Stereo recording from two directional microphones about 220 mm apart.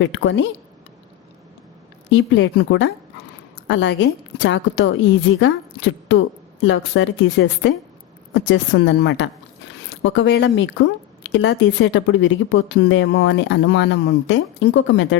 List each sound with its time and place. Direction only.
0.0 s a woman's voice: 55° left (ahead or behind)
2.0 s a woman's voice: 55° left (ahead or behind)